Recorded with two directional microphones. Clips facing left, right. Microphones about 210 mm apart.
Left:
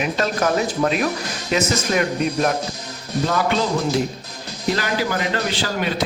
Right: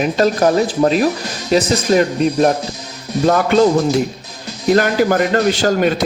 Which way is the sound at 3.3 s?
50° right (ahead or behind).